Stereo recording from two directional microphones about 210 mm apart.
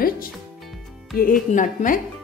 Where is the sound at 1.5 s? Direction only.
40° left (ahead or behind).